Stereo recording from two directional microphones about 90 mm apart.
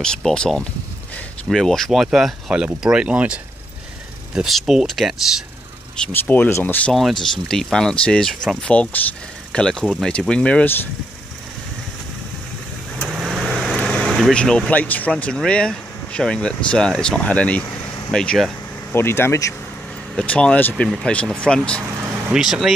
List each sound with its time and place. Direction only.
0.0 s speech: 10° left (ahead or behind)
6.1 s speech: 20° left (ahead or behind)
6.9 s speech: centre (ahead or behind)
13.0 s vehicle: 10° right (ahead or behind)
14.3 s speech: 10° left (ahead or behind)
18.1 s vehicle: 5° left (ahead or behind)
18.9 s speech: 25° left (ahead or behind)
20.2 s speech: 10° left (ahead or behind)
22.3 s speech: 5° right (ahead or behind)